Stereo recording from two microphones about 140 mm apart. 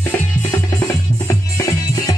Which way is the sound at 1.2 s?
25° left (ahead or behind).